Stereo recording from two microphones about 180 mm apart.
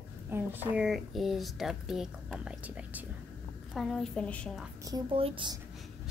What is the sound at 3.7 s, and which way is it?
Speech, centre (ahead or behind).